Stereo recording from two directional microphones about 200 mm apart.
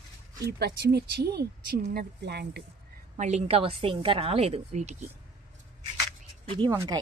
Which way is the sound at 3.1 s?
35° right (ahead or behind).